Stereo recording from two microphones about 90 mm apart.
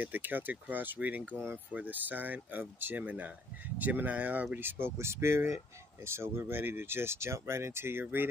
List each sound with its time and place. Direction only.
0.0 s speech: 20° right (ahead or behind)